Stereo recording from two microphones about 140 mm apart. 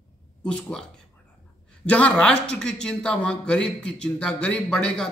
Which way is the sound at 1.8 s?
10° left (ahead or behind).